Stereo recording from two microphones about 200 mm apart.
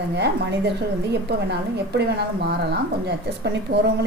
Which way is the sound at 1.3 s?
55° right (ahead or behind).